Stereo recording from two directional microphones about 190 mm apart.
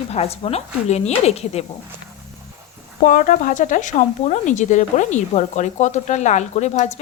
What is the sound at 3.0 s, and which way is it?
Speech, 45° left (ahead or behind).